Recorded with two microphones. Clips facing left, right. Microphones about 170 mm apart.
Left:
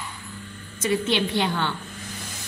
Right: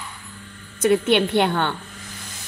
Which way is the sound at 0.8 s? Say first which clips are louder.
Right 6 dB; 60° right (ahead or behind).